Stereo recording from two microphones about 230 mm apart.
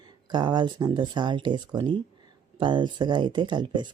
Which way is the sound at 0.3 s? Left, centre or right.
Centre.